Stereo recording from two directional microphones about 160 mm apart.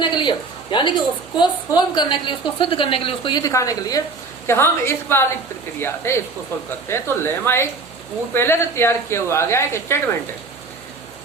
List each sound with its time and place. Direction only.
0.0 s a woman's voice: 30° left (ahead or behind)